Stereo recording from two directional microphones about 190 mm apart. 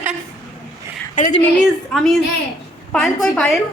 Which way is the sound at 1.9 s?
Centre (ahead or behind).